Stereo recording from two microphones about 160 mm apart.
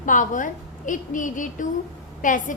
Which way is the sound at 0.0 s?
55° left (ahead or behind).